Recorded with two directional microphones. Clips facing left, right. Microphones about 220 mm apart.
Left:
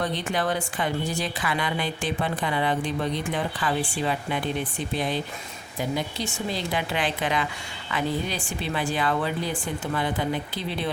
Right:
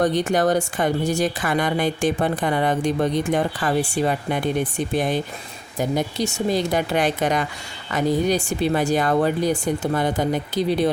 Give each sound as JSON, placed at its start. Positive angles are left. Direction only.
{"t": 0.0, "sound": "speech", "side_deg": -45}